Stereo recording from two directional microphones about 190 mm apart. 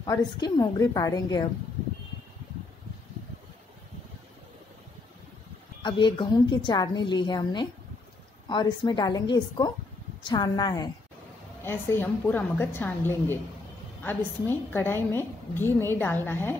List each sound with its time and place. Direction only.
0.0 s a woman's voice: 20° left (ahead or behind)
5.8 s a woman's voice: 25° left (ahead or behind)